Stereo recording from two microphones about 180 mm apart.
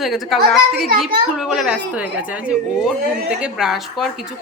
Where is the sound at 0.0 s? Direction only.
Centre (ahead or behind).